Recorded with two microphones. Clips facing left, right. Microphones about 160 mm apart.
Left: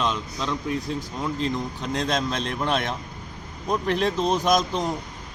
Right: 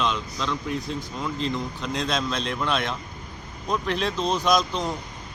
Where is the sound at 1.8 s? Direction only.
50° left (ahead or behind).